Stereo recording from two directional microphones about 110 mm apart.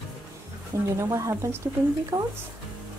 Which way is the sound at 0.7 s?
25° right (ahead or behind).